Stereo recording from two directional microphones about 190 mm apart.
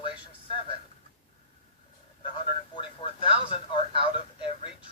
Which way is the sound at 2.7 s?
25° left (ahead or behind).